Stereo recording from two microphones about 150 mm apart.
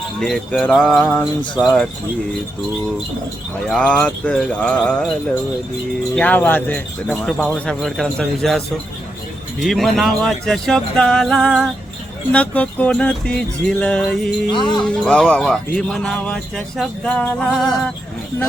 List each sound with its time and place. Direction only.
0.2 s speech: centre (ahead or behind)
3.7 s speech: 5° left (ahead or behind)
6.1 s speech: 10° left (ahead or behind)